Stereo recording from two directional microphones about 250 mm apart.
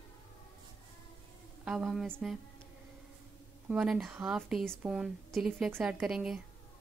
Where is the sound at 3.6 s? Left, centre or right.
Centre.